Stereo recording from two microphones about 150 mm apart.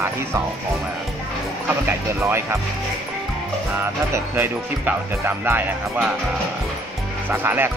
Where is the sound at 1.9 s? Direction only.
15° right (ahead or behind).